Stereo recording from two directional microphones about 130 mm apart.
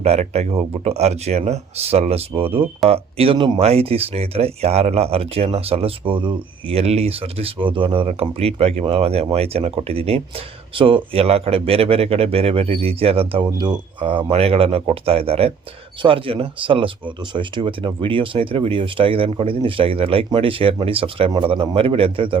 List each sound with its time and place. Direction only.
0.0 s speech: 55° right (ahead or behind)
3.3 s speech: 35° right (ahead or behind)
3.6 s speech: 50° right (ahead or behind)